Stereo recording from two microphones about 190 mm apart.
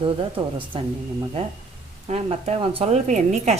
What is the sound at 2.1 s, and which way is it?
Speech, 30° right (ahead or behind).